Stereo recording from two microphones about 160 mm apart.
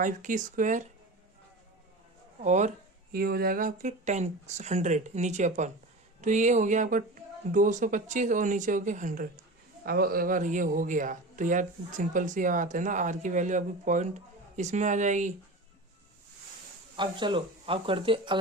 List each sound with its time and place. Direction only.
0.0 s a man's voice: 55° right (ahead or behind)
2.4 s a man's voice: 50° right (ahead or behind)
3.1 s a man's voice: 70° right (ahead or behind); by 9.2 s 55° right (ahead or behind)
9.8 s a man's voice: 70° right (ahead or behind); by 15.3 s 50° right (ahead or behind)
17.0 s speech: 30° right (ahead or behind)